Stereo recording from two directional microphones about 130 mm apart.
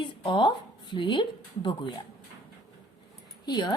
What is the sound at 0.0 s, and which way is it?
A woman's voice, 40° left (ahead or behind).